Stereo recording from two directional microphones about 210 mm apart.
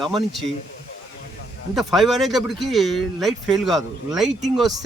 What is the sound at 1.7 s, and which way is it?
Speech, centre (ahead or behind).